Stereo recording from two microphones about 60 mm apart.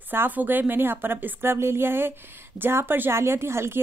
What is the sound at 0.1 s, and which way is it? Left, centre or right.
A woman's voice, right.